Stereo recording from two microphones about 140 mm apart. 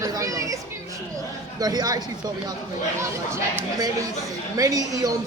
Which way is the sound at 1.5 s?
25° right (ahead or behind).